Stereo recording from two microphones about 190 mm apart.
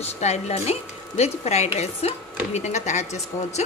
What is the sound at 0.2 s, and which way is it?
Speech, 35° left (ahead or behind).